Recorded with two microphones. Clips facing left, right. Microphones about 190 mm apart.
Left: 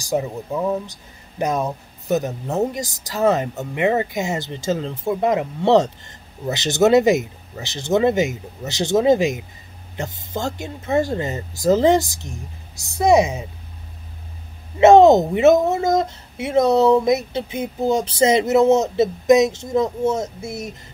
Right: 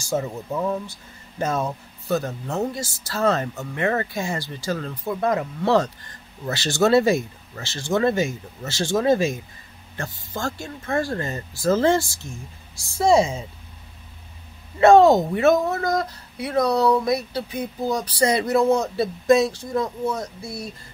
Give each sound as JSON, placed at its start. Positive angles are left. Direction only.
{"t": 0.0, "sound": "speech", "side_deg": 15}
{"t": 14.8, "sound": "speech", "side_deg": 20}